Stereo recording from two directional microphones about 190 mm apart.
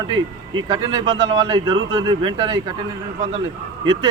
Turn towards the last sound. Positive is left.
turn(degrees=-25)  # may be behind; listen again after turning